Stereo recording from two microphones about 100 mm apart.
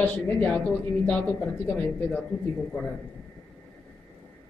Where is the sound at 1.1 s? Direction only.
15° left (ahead or behind).